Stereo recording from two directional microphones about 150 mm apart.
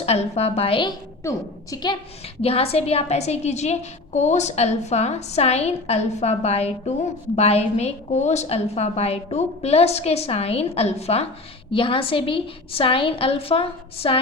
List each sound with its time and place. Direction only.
0.0 s a woman's voice: 45° left (ahead or behind)
2.4 s a woman's voice: 40° left (ahead or behind)